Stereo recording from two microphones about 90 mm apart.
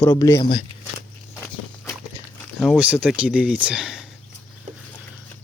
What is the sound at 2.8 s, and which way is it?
Speech, 10° right (ahead or behind).